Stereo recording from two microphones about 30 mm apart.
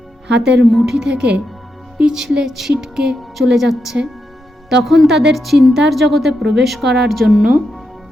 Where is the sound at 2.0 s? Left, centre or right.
Right.